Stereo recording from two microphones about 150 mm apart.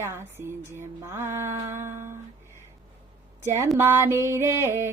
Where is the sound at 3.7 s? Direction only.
15° right (ahead or behind).